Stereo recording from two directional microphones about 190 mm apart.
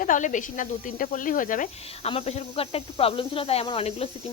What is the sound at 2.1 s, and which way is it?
Speech, 30° left (ahead or behind).